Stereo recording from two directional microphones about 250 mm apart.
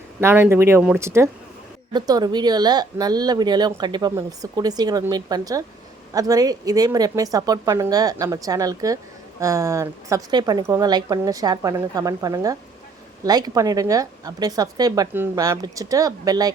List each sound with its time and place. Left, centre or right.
0.2 s speech: centre